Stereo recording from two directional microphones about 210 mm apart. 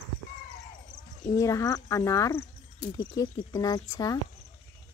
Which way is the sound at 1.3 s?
15° left (ahead or behind).